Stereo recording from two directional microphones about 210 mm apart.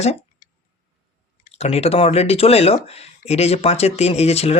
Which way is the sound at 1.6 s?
30° left (ahead or behind).